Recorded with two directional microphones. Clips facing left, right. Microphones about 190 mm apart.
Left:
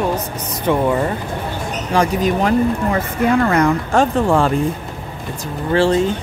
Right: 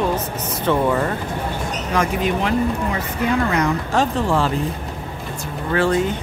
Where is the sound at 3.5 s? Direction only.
50° left (ahead or behind).